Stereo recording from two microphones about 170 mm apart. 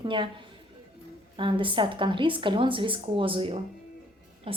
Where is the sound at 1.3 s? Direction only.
30° right (ahead or behind).